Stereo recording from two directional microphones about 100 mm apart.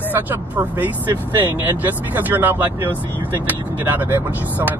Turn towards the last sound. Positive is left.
turn(degrees=-20)  # may be behind; listen again after turning